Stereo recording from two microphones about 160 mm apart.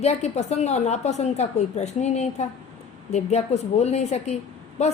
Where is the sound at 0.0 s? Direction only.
45° left (ahead or behind).